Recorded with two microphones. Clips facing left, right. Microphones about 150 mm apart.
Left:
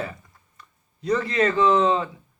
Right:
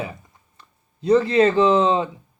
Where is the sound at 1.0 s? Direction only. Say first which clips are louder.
Right 6 dB; 30° right (ahead or behind).